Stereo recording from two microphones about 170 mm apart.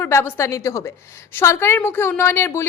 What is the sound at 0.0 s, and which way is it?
Speech, 15° left (ahead or behind).